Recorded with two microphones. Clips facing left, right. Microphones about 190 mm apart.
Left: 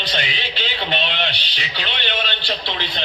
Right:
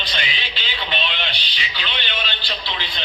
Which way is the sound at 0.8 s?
65° left (ahead or behind).